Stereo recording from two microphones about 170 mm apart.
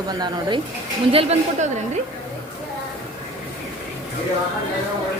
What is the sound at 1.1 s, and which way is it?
Speech, 35° right (ahead or behind).